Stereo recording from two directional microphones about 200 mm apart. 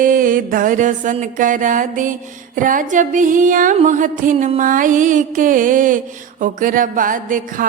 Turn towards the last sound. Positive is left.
turn(degrees=-40)  # may be behind; listen again after turning